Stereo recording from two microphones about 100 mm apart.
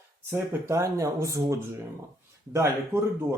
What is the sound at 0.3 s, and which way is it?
Speech, 30° right (ahead or behind).